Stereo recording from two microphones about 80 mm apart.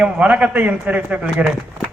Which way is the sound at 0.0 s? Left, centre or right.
Centre.